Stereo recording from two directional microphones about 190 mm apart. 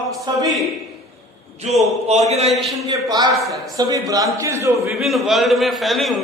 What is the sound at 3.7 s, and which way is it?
A man's voice, 20° right (ahead or behind).